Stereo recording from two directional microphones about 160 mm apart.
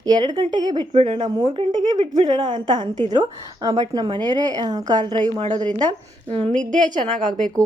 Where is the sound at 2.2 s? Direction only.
25° right (ahead or behind).